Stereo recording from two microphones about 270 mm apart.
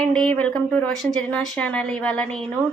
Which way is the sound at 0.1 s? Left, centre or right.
Centre.